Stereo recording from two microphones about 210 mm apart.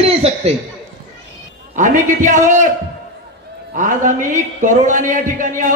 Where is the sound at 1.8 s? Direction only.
35° right (ahead or behind).